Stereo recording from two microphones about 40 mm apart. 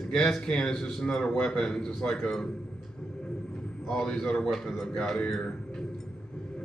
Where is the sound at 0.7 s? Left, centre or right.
Centre.